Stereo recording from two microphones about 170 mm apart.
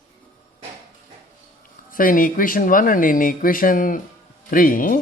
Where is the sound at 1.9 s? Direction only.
55° left (ahead or behind).